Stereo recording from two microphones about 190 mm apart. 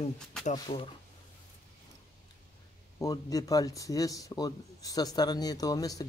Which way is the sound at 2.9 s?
20° left (ahead or behind).